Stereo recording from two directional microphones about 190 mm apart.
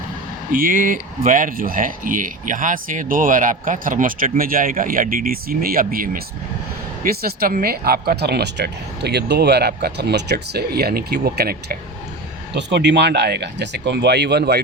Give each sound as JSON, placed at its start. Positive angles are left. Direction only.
{"t": 0.5, "sound": "speech", "side_deg": -45}
{"t": 12.5, "sound": "speech", "side_deg": -65}